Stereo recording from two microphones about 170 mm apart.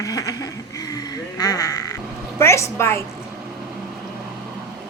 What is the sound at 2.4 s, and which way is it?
Speech, 15° left (ahead or behind).